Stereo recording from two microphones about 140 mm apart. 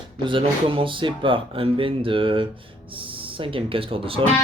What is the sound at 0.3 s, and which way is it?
Speech, 40° right (ahead or behind).